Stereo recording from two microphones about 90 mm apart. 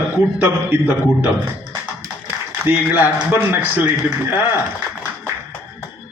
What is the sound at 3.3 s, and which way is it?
Speech, 20° right (ahead or behind).